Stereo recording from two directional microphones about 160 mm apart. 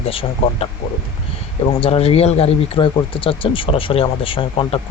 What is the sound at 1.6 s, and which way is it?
Speech, 35° left (ahead or behind).